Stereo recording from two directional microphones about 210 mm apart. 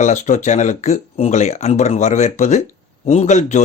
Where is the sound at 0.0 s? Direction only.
35° left (ahead or behind).